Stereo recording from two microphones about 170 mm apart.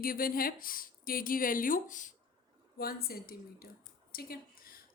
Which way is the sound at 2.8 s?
60° left (ahead or behind).